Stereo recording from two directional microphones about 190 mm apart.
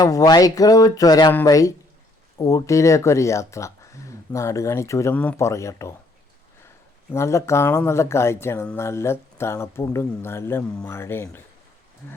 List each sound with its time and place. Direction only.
0.0 s speech: 20° left (ahead or behind)
7.1 s speech: 15° left (ahead or behind)